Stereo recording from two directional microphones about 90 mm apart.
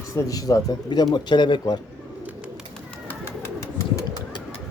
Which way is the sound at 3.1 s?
30° left (ahead or behind).